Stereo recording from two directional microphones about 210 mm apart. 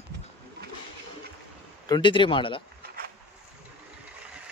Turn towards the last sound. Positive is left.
turn(degrees=-45)  # may be behind; listen again after turning